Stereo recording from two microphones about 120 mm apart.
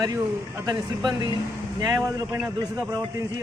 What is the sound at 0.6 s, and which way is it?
A man's voice, 35° right (ahead or behind).